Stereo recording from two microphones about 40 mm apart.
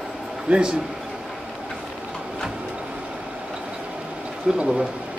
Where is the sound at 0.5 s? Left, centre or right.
Right.